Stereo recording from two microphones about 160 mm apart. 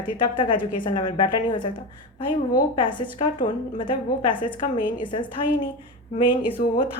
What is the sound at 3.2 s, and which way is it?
A woman's voice, 30° left (ahead or behind).